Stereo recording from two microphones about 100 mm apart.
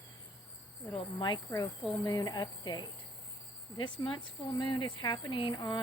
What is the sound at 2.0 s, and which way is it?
Speech, 40° left (ahead or behind).